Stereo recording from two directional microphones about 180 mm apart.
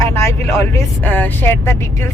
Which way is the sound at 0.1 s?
15° left (ahead or behind).